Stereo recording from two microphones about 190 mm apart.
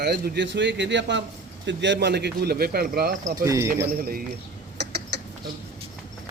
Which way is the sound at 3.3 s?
15° right (ahead or behind).